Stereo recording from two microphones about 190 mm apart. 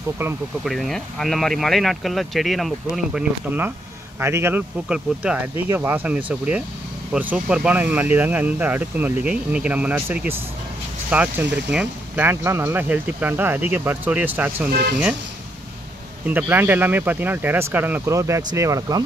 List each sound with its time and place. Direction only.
0.7 s speech: centre (ahead or behind)
14.7 s speech: 55° right (ahead or behind)
16.3 s speech: 10° right (ahead or behind)